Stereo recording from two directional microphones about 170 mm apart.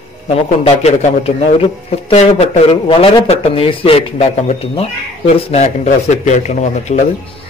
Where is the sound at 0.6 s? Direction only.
40° left (ahead or behind).